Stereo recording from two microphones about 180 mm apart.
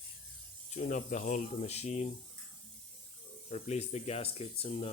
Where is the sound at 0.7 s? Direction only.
45° left (ahead or behind).